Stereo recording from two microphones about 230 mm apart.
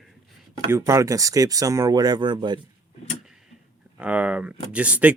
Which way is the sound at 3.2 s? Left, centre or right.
Centre.